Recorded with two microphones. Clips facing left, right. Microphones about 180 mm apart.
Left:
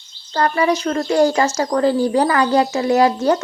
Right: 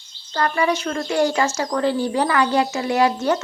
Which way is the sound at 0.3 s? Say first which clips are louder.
Left 3 dB; 35° left (ahead or behind).